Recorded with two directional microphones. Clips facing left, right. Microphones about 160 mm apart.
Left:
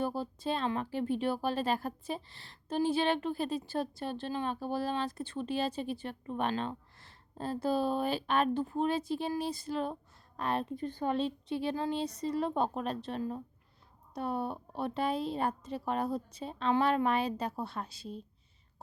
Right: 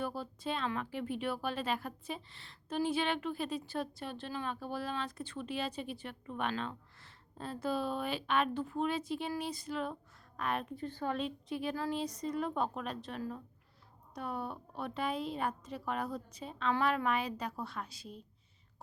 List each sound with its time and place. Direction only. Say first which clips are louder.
0.0 s speech: left 4 dB; 30° left (ahead or behind)
10.8 s a woman's voice: left 4 dB; 20° left (ahead or behind)
11.2 s a woman's voice: left 4 dB; 30° left (ahead or behind)